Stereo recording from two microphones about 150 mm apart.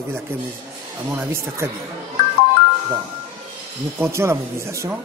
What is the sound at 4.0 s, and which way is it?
Speech, 20° right (ahead or behind).